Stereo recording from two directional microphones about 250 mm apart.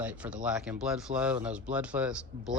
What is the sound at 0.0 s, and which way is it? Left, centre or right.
Speech, centre.